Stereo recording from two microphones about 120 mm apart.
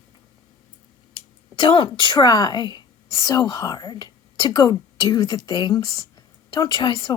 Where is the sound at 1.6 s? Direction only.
40° left (ahead or behind).